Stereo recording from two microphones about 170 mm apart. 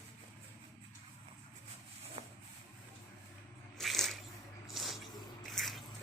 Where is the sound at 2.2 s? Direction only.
40° right (ahead or behind).